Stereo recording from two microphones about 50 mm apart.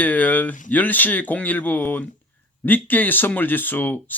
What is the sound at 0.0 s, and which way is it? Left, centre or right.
Speech, left.